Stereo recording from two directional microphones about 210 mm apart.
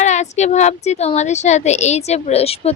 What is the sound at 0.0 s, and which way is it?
A child's voice, 35° left (ahead or behind).